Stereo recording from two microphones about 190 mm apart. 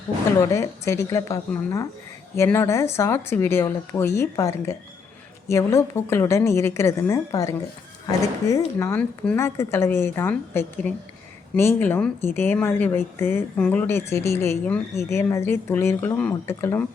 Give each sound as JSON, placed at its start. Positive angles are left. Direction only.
{"t": 0.3, "sound": "a woman's voice", "side_deg": 15}